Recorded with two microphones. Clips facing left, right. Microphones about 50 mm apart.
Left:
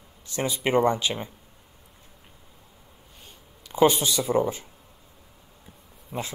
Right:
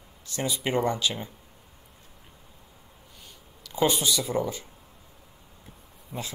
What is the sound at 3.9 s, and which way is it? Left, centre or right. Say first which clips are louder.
Speech: left 2 dB; left.